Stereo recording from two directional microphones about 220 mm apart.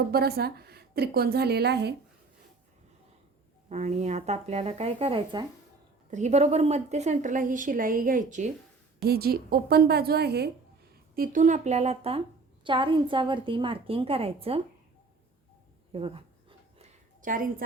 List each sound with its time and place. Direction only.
0.1 s a woman's voice: 45° right (ahead or behind)
3.7 s a woman's voice: 30° right (ahead or behind)
6.1 s a woman's voice: 30° right (ahead or behind)
15.9 s a sound: 25° right (ahead or behind)